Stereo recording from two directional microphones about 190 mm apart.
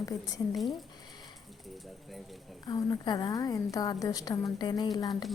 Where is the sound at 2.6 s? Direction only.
20° left (ahead or behind).